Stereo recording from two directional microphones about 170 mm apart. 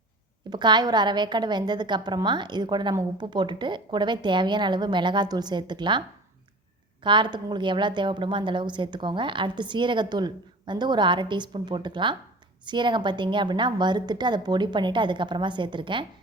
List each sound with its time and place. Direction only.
0.5 s a woman's voice: 25° right (ahead or behind)
7.0 s a woman's voice: 25° right (ahead or behind)